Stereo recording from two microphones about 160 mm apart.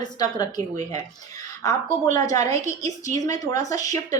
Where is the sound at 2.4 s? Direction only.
45° right (ahead or behind).